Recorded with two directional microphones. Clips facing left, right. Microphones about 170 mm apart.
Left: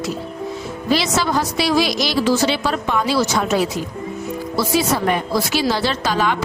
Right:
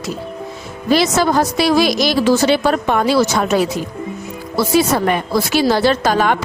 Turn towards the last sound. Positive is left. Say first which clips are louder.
# right 5 dB
turn(degrees=-50)  # may be behind; listen again after turning